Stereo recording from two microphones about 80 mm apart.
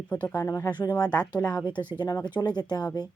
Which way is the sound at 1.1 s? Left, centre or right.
Centre.